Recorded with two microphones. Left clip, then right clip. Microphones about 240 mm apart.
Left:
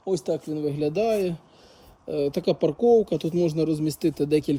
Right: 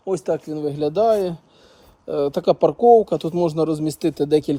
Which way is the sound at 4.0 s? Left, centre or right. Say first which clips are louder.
Right 5 dB; centre.